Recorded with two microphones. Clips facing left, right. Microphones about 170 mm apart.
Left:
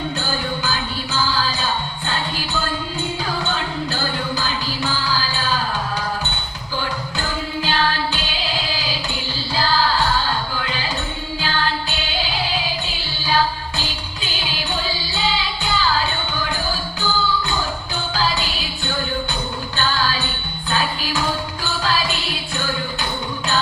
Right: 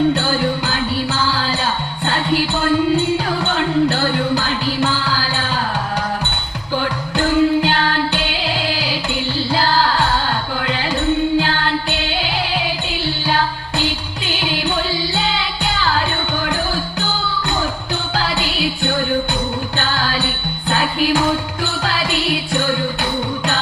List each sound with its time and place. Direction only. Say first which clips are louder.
0.1 s music: right 7 dB; 70° right (ahead or behind)
6.7 s music: right 6 dB; 65° right (ahead or behind)
18.1 s music: right 1 dB; 65° right (ahead or behind)